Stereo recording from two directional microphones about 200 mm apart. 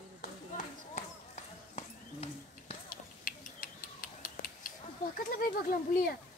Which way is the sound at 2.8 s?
45° left (ahead or behind).